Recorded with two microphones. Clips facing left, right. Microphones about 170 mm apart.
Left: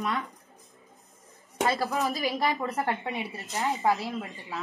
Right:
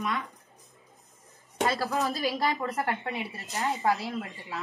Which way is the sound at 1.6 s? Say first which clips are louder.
Left 1 dB; 20° left (ahead or behind).